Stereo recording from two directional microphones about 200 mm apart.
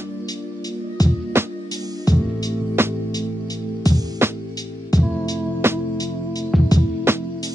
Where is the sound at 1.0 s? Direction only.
20° left (ahead or behind).